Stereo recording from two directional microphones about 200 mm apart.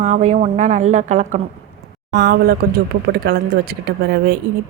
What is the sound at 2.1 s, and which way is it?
Speech, 55° right (ahead or behind).